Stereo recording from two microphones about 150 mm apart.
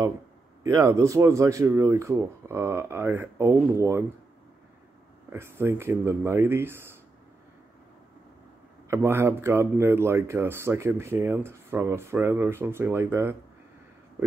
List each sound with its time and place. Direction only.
0.7 s speech: 20° right (ahead or behind)
5.3 s speech: 15° right (ahead or behind)
8.8 s speech: 15° right (ahead or behind)